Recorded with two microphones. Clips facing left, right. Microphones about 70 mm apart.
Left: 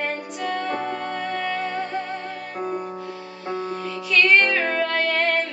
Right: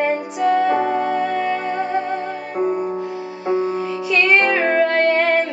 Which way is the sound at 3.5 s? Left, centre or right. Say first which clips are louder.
Right 8 dB; centre.